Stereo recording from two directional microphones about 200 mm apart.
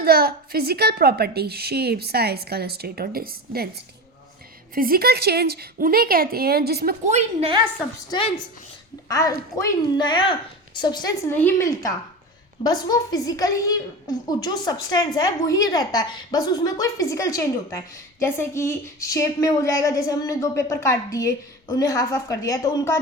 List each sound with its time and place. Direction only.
0.0 s a woman's voice: 50° right (ahead or behind)
4.7 s a woman's voice: 45° right (ahead or behind)
7.0 s a woman's voice: 35° right (ahead or behind)
7.9 s a woman's voice: 20° left (ahead or behind)